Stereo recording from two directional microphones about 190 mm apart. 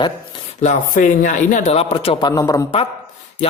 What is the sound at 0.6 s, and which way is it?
A man's voice, 40° left (ahead or behind).